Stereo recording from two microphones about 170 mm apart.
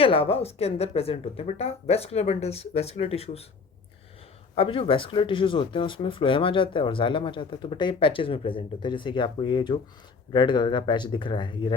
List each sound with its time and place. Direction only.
0.0 s speech: 35° left (ahead or behind)
4.5 s speech: 30° left (ahead or behind)